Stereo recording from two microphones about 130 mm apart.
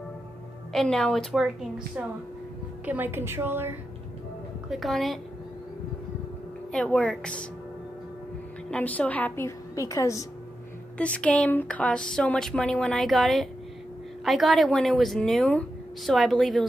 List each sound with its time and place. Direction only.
0.7 s a woman's voice: 5° left (ahead or behind)
2.8 s a woman's voice: 15° right (ahead or behind)
4.6 s a woman's voice: centre (ahead or behind)
6.7 s speech: 5° left (ahead or behind)
8.6 s speech: 10° left (ahead or behind)
11.0 s a woman's voice: 10° left (ahead or behind)